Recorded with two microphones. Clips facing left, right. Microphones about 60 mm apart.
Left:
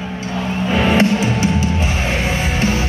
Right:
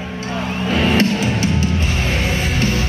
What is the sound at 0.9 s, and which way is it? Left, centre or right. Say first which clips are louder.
Music: left 2 dB; left.